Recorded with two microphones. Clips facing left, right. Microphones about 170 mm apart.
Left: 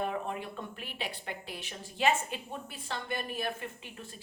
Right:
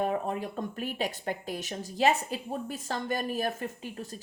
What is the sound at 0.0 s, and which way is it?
A woman's voice, 40° right (ahead or behind).